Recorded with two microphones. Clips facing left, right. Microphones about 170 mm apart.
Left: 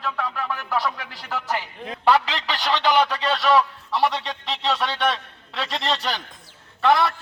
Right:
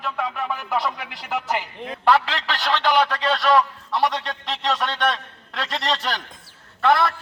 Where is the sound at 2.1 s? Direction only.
10° left (ahead or behind).